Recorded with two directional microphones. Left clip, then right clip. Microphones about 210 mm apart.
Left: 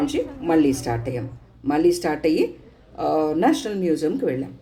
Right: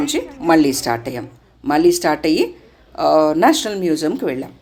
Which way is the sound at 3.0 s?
15° right (ahead or behind).